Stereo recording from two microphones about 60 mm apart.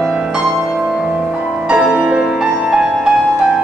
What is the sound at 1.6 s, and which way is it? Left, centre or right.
Music, centre.